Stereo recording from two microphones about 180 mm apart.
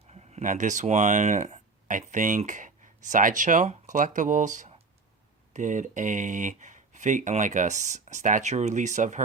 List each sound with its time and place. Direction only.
0.1 s speech: 35° right (ahead or behind)